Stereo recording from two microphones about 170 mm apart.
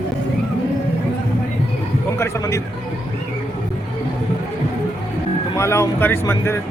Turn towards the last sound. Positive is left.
turn(degrees=15)  # may be behind; listen again after turning